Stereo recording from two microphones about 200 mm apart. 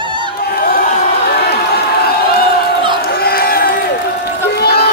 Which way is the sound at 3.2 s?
50° left (ahead or behind).